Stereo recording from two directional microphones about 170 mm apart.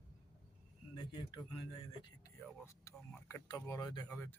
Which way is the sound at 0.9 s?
25° left (ahead or behind).